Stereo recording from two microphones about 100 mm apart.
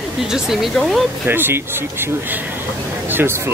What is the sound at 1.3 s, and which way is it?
Speech, 20° right (ahead or behind).